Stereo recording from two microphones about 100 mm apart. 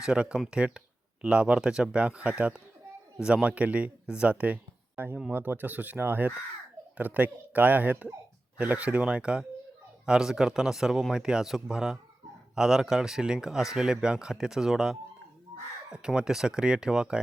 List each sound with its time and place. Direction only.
0.0 s speech: 10° right (ahead or behind)